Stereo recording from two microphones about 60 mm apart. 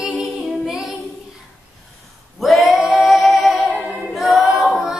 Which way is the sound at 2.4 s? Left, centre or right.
Centre.